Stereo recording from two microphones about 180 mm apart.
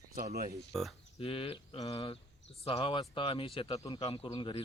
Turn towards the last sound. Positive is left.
turn(degrees=25)  # may be behind; listen again after turning